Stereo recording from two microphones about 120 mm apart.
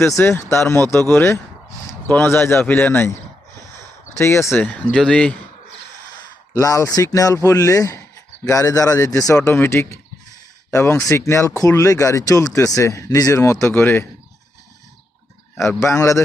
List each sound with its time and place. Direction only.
0.0 s speech: 20° left (ahead or behind)
6.5 s speech: 25° left (ahead or behind)
15.5 s speech: 20° left (ahead or behind)